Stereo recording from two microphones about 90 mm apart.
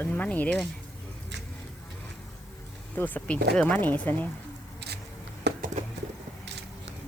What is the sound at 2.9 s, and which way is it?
Speech, 20° left (ahead or behind).